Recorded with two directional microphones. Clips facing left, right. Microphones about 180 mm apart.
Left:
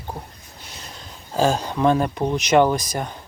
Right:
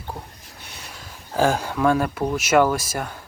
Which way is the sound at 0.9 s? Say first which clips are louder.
Even; 25° left (ahead or behind).